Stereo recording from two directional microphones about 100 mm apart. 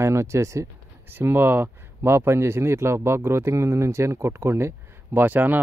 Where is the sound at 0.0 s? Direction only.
30° right (ahead or behind).